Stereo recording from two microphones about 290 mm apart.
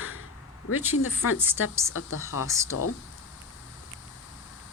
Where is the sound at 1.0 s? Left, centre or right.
Left.